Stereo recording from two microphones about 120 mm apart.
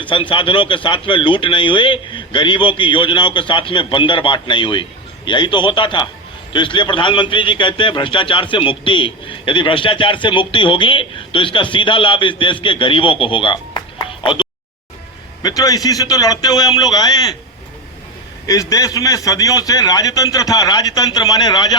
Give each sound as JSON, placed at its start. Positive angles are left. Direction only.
{"t": 0.0, "sound": "a man's voice", "side_deg": 45}
{"t": 15.4, "sound": "a man's voice", "side_deg": 30}
{"t": 18.4, "sound": "a man's voice", "side_deg": 30}